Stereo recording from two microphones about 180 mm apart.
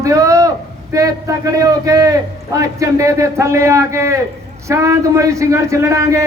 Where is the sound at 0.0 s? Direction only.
15° right (ahead or behind).